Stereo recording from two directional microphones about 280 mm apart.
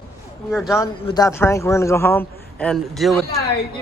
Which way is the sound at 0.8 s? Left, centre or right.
Centre.